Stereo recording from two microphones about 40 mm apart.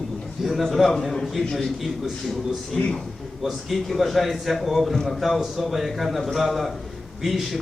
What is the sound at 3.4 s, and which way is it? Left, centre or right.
A man's voice, centre.